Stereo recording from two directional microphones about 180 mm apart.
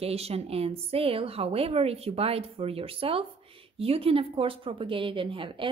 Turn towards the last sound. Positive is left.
turn(degrees=-30)  # may be behind; listen again after turning